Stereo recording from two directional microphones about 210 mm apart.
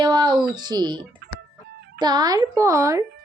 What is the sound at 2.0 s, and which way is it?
Speech, 20° right (ahead or behind).